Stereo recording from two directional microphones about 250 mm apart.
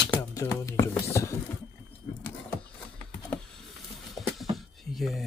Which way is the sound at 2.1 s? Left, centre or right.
Centre.